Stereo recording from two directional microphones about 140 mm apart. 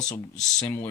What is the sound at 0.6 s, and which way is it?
Speech, 20° left (ahead or behind).